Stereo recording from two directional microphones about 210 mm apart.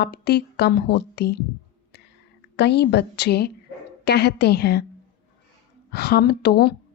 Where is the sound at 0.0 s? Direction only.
50° left (ahead or behind).